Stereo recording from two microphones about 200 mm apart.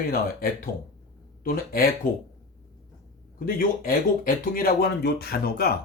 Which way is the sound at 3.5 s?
45° left (ahead or behind).